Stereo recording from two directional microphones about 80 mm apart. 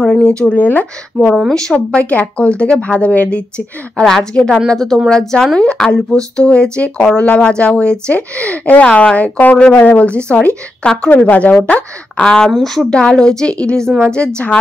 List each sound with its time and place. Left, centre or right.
0.0 s a sound: centre
0.4 s speech: centre
1.5 s speech: centre
13.8 s a woman's voice: right
14.1 s speech: centre